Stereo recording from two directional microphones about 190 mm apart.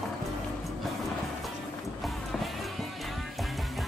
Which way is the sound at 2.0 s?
Centre (ahead or behind).